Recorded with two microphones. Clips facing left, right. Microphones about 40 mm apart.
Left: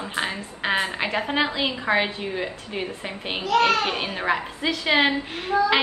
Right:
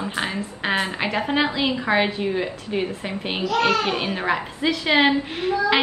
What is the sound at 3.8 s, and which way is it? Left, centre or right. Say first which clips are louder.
Speech: right 2 dB; right.